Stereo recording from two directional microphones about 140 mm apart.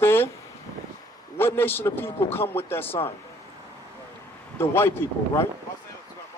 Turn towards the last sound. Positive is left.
turn(degrees=15)  # may be behind; listen again after turning